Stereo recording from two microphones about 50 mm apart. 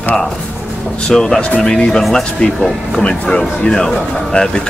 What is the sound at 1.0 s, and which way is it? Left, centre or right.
Speech, centre.